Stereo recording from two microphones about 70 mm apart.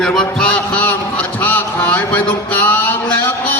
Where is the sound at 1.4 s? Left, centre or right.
Left.